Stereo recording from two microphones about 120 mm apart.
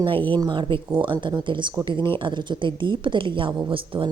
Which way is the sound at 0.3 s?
40° right (ahead or behind).